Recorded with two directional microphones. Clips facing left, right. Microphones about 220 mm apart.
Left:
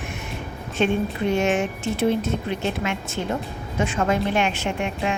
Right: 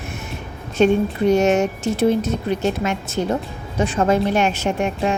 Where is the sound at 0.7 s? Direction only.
40° right (ahead or behind).